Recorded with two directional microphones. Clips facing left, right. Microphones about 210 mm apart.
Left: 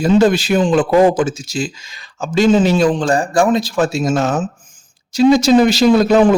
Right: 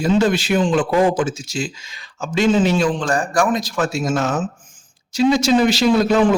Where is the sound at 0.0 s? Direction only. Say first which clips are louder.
Left 4 dB; 40° left (ahead or behind).